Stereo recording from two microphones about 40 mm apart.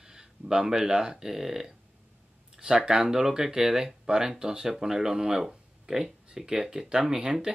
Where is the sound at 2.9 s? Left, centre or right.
Centre.